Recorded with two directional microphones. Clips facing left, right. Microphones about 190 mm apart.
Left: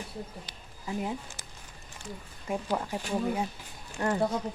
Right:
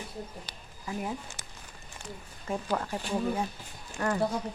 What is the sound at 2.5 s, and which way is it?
Speech, 15° left (ahead or behind).